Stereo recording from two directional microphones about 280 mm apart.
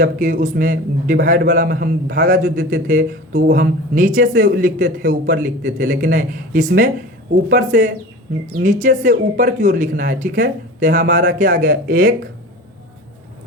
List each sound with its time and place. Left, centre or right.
0.0 s a man's voice: right